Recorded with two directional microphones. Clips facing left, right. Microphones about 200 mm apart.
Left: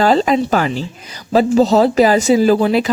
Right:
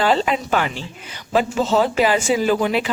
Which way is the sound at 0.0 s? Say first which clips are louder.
Left 6 dB; 40° left (ahead or behind).